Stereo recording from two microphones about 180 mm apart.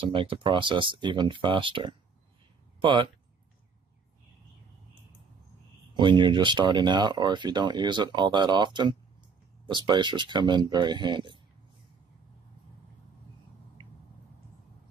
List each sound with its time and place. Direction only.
0.1 s speech: 30° right (ahead or behind)
5.9 s speech: 25° right (ahead or behind)